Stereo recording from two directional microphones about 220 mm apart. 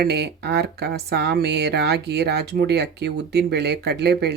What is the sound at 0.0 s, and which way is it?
Speech, 50° right (ahead or behind).